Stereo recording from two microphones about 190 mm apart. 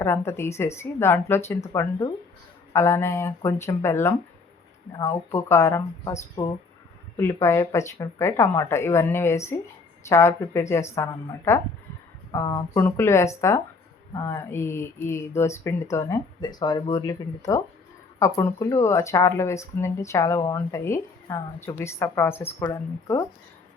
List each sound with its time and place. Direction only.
0.0 s speech: 15° left (ahead or behind)
18.2 s speech: 15° left (ahead or behind)